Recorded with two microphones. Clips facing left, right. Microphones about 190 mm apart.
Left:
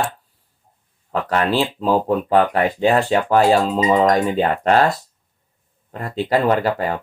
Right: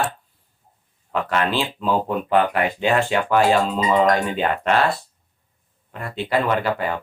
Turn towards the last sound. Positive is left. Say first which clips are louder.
# left 3 dB
turn(degrees=40)  # may be behind; listen again after turning